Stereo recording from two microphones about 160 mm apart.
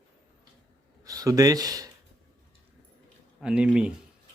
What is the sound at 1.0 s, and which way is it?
Speech, 20° right (ahead or behind).